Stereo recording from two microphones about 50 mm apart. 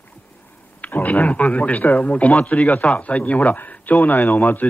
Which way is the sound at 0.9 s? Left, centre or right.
Left.